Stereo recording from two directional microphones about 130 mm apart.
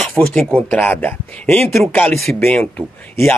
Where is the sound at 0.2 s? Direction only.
15° left (ahead or behind).